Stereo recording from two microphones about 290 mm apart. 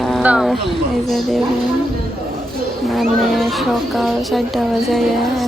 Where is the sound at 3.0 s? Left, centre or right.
Centre.